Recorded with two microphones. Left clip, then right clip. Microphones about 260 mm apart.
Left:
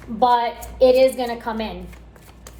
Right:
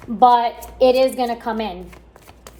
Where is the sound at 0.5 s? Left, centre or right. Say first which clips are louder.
Even; right.